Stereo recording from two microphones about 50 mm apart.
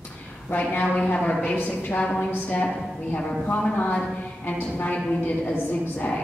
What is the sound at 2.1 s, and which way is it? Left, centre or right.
A woman's voice, left.